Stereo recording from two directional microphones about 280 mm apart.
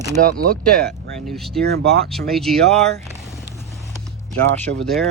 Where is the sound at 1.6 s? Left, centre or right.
Right.